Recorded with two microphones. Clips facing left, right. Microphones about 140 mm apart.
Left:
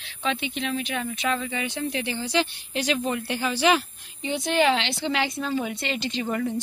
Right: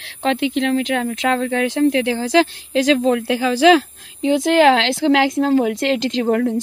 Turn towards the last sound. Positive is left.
turn(degrees=-65)  # may be behind; listen again after turning